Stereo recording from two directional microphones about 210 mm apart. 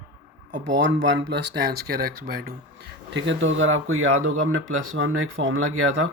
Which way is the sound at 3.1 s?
60° right (ahead or behind).